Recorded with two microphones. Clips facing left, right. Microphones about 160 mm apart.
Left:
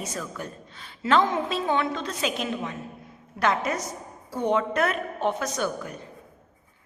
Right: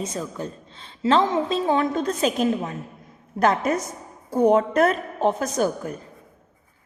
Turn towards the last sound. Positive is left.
turn(degrees=-40)  # may be behind; listen again after turning